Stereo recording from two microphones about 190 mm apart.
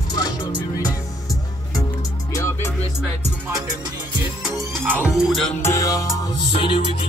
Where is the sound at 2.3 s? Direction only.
15° left (ahead or behind).